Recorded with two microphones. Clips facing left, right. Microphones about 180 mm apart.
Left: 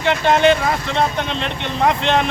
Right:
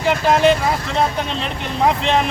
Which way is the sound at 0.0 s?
5° right (ahead or behind).